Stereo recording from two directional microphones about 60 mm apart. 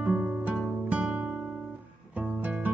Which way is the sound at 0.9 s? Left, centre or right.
Right.